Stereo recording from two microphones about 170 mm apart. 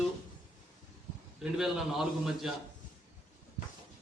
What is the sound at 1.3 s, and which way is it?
A man's voice, centre (ahead or behind).